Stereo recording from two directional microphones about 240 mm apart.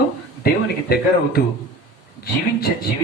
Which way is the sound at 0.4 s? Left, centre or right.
Left.